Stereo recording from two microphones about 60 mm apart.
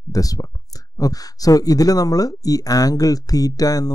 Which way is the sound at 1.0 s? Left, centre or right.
Left.